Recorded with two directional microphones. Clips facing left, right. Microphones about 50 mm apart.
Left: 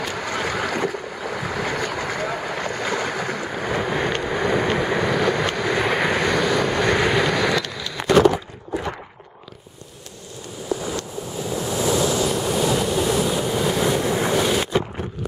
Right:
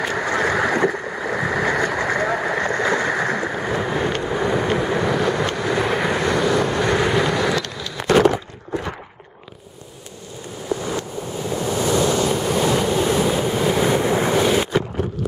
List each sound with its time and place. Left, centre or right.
0.0 s boat: right
3.9 s vehicle: centre
6.3 s vehicle: centre
6.9 s vehicle: centre
7.2 s vehicle: centre
11.5 s waves: centre